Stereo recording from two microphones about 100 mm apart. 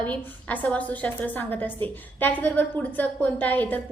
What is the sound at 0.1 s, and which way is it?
A woman's voice, 15° left (ahead or behind).